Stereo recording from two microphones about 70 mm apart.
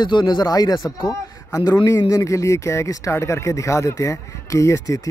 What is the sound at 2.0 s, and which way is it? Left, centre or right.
Speech, left.